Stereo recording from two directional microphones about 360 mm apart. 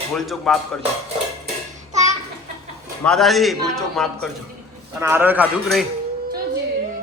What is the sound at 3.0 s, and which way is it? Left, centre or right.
A man's voice, centre.